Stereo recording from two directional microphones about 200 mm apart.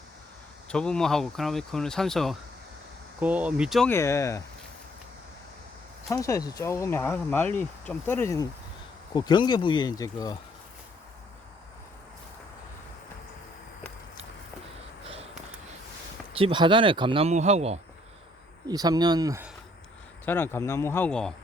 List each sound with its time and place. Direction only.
0.7 s speech: 5° left (ahead or behind)
3.8 s speech: 15° left (ahead or behind)
6.1 s speech: 15° left (ahead or behind)
15.0 s a sound: 30° right (ahead or behind)
16.3 s speech: 25° right (ahead or behind)
18.7 s speech: 20° right (ahead or behind)
20.2 s speech: 10° left (ahead or behind)